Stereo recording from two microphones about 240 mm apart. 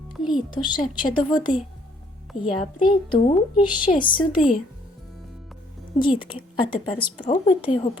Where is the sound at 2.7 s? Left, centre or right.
Centre.